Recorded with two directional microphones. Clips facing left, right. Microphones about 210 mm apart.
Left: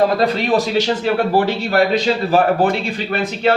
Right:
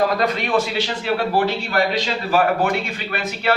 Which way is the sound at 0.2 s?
35° left (ahead or behind).